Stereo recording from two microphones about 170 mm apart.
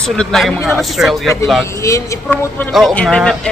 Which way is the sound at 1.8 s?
20° left (ahead or behind).